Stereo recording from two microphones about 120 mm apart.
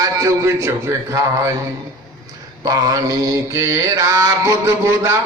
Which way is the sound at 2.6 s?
30° right (ahead or behind).